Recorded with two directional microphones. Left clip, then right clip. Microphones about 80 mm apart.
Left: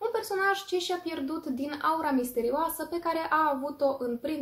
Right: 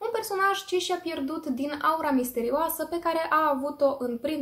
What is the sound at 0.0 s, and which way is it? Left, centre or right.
A woman's voice, right.